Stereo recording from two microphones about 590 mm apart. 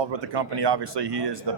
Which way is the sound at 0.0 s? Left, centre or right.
Right.